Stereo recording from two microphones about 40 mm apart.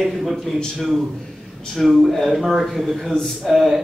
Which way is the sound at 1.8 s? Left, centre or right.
Centre.